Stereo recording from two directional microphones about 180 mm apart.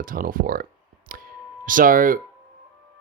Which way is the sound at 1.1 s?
50° right (ahead or behind).